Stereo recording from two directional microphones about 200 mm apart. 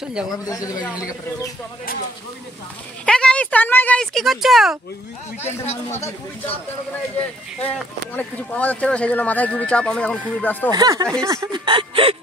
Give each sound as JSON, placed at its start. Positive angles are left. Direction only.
{"t": 0.5, "sound": "speech", "side_deg": 15}
{"t": 3.1, "sound": "speech", "side_deg": 5}
{"t": 5.4, "sound": "speech", "side_deg": 10}
{"t": 8.2, "sound": "speech", "side_deg": 5}
{"t": 10.7, "sound": "speech", "side_deg": -20}